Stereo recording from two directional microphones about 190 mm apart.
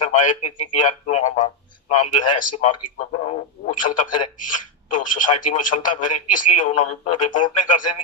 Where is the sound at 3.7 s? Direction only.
45° left (ahead or behind).